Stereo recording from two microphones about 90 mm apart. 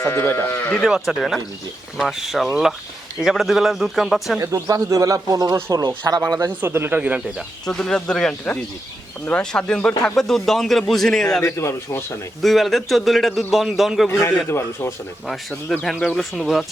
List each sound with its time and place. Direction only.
0.0 s speech: 25° left (ahead or behind)
0.9 s a man's voice: 5° right (ahead or behind)
4.4 s speech: 35° right (ahead or behind); by 7.2 s 20° right (ahead or behind)
7.7 s a man's voice: 5° left (ahead or behind)
11.4 s speech: 30° left (ahead or behind)
12.4 s a man's voice: centre (ahead or behind)
14.1 s a man's voice: 30° left (ahead or behind)
15.8 s a man's voice: 5° left (ahead or behind)